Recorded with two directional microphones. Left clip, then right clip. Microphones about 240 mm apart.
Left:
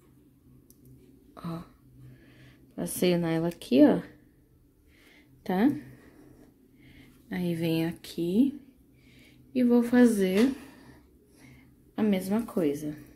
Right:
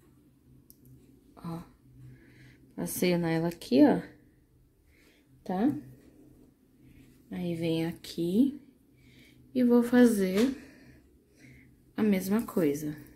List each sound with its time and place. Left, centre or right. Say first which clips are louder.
1.3 s a sound: left 2 dB; centre
2.3 s speech: left 2 dB; centre
5.4 s speech: left 4 dB; left
7.2 s a woman's voice: left 2 dB; centre
10.4 s speech: left 2 dB; left
11.9 s a woman's voice: left 1 dB; centre